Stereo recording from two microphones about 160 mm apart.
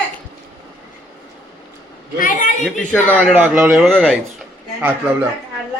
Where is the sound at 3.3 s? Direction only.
10° right (ahead or behind).